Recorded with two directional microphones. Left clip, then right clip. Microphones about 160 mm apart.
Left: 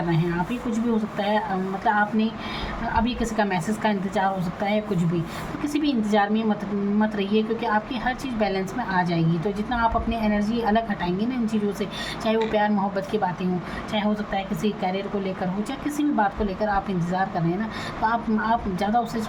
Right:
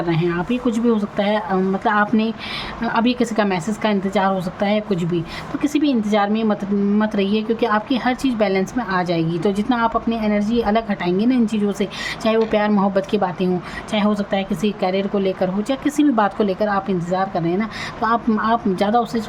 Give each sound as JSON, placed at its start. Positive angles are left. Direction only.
{"t": 0.1, "sound": "a woman's voice", "side_deg": -50}